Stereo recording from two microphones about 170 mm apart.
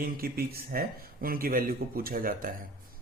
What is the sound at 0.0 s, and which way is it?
Speech, 60° right (ahead or behind).